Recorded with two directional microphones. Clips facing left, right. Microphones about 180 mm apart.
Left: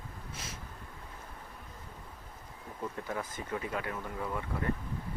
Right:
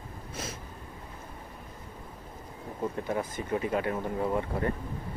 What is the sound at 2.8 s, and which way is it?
Speech, 25° right (ahead or behind).